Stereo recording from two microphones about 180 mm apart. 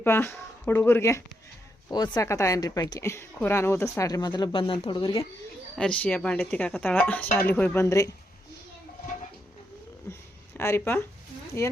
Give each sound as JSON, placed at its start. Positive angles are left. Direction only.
{"t": 0.0, "sound": "speech", "side_deg": 15}
{"t": 5.7, "sound": "speech", "side_deg": 5}
{"t": 10.6, "sound": "speech", "side_deg": 15}